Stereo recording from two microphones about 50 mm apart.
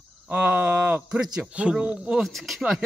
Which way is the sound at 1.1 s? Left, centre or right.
Centre.